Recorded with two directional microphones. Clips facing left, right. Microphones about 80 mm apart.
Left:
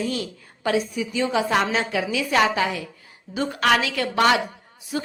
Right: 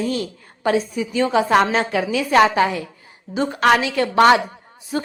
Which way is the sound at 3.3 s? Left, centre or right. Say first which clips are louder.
Right 4 dB; right.